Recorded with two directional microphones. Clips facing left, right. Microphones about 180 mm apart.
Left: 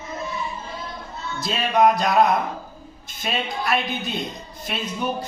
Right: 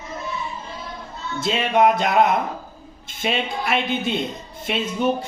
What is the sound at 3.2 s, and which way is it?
Speech, 25° right (ahead or behind).